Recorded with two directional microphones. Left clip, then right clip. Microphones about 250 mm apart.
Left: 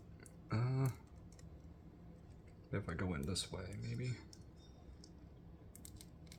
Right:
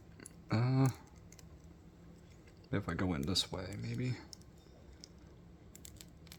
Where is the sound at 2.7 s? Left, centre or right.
Right.